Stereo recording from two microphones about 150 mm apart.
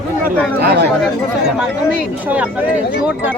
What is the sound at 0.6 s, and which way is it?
Speech, 90° right.